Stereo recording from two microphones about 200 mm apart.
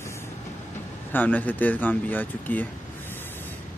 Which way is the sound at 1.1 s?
10° left (ahead or behind).